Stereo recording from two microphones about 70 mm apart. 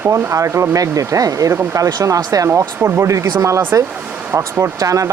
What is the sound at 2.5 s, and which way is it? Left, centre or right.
Speech, right.